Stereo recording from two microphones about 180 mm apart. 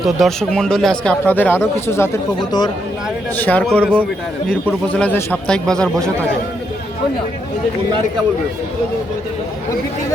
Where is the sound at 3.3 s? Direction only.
10° left (ahead or behind).